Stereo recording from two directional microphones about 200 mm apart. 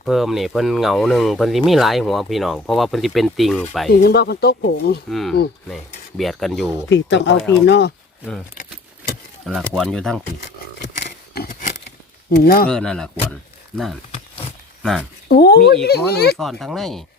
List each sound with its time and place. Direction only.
0.0 s speech: centre (ahead or behind)
3.8 s speech: 55° left (ahead or behind)
5.0 s speech: centre (ahead or behind)
6.9 s speech: 60° left (ahead or behind)
9.5 s speech: centre (ahead or behind)
12.4 s speech: 50° left (ahead or behind)
12.6 s speech: 5° left (ahead or behind)
14.1 s a sound: 30° left (ahead or behind)
15.3 s speech: 55° left (ahead or behind)
16.4 s speech: centre (ahead or behind)